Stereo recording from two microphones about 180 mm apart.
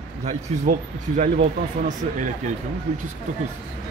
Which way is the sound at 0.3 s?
45° right (ahead or behind).